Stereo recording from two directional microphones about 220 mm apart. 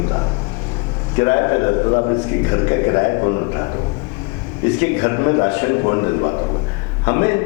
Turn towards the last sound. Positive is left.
turn(degrees=15)  # may be behind; listen again after turning